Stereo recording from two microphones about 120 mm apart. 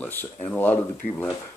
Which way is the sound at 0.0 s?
15° left (ahead or behind).